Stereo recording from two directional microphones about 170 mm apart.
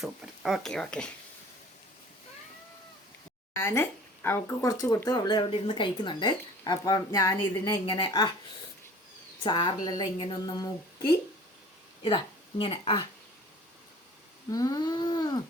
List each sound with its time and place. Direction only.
0.0 s speech: centre (ahead or behind)
3.6 s speech: 15° left (ahead or behind)
9.4 s a woman's voice: 30° left (ahead or behind)
14.5 s speech: 20° left (ahead or behind)